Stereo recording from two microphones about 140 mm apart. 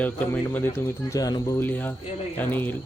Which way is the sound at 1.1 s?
25° left (ahead or behind).